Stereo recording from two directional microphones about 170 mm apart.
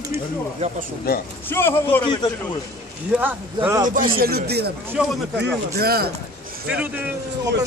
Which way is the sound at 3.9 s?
55° right (ahead or behind).